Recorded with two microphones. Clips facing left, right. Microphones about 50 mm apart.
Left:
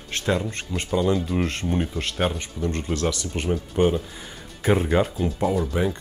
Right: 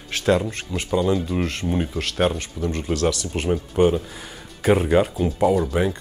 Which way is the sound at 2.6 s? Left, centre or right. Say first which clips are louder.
Left 1 dB; left.